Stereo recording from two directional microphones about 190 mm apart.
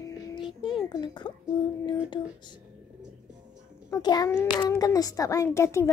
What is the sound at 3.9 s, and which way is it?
A child's voice, 20° left (ahead or behind).